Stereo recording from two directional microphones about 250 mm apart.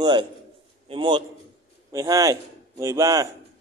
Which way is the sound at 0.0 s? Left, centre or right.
Centre.